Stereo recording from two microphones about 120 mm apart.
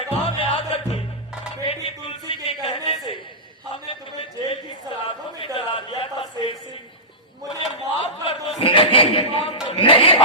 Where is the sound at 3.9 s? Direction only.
45° left (ahead or behind).